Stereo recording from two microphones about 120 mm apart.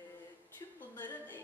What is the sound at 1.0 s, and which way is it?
Music, 15° left (ahead or behind).